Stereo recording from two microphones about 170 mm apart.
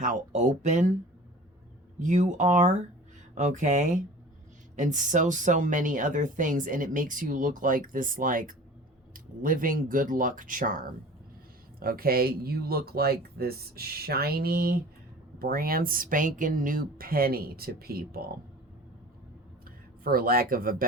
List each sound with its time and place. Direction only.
0.0 s speech: 50° right (ahead or behind)
2.0 s speech: 45° right (ahead or behind)
11.8 s speech: 60° right (ahead or behind)
20.1 s speech: 60° right (ahead or behind)